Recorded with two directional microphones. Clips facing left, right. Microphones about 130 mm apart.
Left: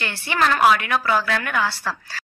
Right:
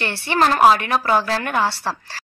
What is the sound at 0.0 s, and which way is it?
A woman's voice, 35° right (ahead or behind).